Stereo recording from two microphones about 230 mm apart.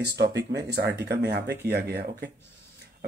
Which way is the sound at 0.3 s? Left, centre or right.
Right.